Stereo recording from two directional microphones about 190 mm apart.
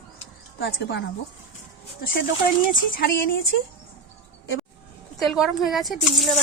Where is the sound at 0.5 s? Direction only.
65° left (ahead or behind).